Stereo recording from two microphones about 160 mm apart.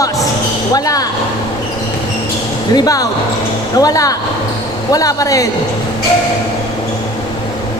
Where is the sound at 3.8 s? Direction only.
20° left (ahead or behind).